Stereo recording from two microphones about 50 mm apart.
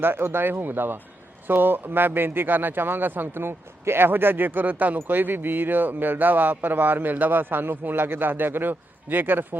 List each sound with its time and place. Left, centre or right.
0.0 s a man's voice: right